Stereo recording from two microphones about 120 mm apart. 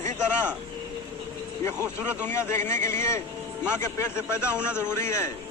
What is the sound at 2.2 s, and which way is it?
A man's voice, 20° left (ahead or behind).